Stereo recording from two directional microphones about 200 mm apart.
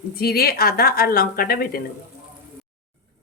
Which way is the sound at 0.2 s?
50° left (ahead or behind).